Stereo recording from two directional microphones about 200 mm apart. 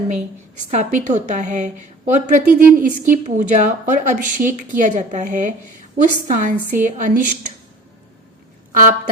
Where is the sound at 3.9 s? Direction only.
40° right (ahead or behind).